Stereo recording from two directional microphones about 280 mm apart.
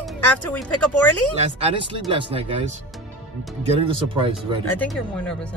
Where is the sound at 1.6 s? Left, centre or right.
Centre.